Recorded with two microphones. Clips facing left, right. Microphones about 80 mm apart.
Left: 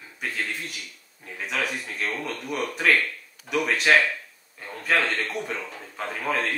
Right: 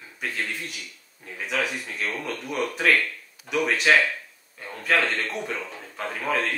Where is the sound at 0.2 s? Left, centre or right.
Centre.